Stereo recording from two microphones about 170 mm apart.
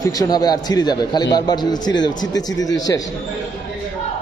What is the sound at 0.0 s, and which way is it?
A man's voice, 20° left (ahead or behind).